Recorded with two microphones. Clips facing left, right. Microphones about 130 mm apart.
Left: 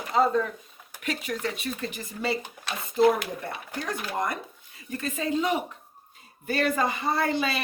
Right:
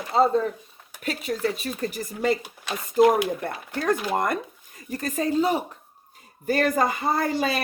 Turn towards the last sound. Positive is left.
turn(degrees=-45)  # may be behind; listen again after turning